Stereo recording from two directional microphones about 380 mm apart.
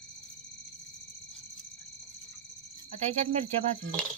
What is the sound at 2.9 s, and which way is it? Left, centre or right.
Speech, centre.